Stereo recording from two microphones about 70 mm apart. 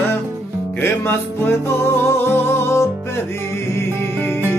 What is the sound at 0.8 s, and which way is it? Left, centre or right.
Music, left.